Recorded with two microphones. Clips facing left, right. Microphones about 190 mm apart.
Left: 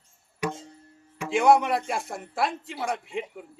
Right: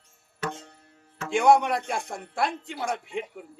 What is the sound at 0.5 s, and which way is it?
Music, 70° right (ahead or behind).